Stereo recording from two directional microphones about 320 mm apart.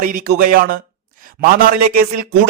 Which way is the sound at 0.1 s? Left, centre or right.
Right.